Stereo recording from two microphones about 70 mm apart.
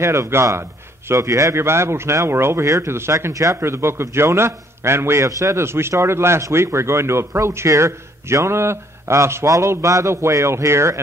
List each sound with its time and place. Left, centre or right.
0.0 s a man's voice: right
2.6 s speech: right
2.9 s a man's voice: right